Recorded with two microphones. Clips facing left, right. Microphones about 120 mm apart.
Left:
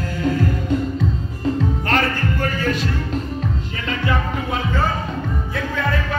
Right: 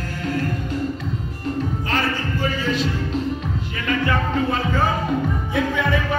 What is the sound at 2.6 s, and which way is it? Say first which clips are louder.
Music: even; 45° left (ahead or behind).